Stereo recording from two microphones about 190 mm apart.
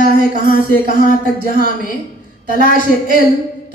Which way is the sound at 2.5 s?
55° right (ahead or behind).